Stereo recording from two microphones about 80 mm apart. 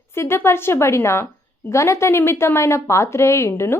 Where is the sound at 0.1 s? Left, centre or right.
Left.